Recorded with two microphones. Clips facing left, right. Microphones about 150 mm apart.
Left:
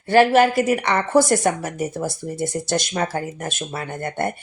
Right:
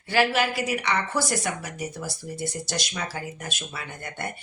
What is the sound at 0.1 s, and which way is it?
Speech, 50° left (ahead or behind).